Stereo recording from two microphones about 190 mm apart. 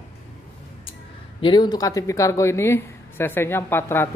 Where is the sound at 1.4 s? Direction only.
25° left (ahead or behind).